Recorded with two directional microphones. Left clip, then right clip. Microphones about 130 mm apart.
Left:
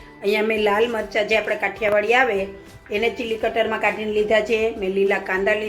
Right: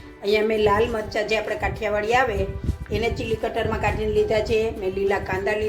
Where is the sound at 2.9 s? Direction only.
50° left (ahead or behind).